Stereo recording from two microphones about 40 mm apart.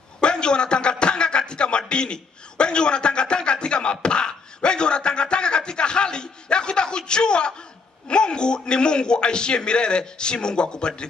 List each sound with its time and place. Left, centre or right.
0.2 s a man's voice: left